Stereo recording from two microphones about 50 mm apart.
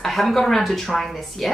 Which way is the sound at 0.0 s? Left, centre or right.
Centre.